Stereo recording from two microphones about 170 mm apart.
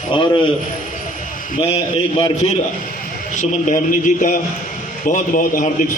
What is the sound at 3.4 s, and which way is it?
A man's voice, 50° left (ahead or behind).